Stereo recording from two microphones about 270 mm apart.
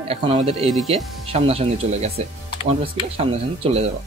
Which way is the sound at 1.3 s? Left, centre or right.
Right.